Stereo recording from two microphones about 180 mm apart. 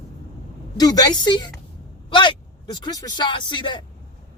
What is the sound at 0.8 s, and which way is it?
Speech, 25° left (ahead or behind).